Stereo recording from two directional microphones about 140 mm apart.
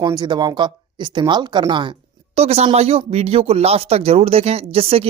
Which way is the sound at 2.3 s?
50° right (ahead or behind).